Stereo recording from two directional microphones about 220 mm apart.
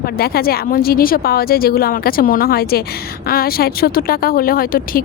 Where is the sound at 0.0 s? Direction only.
45° left (ahead or behind).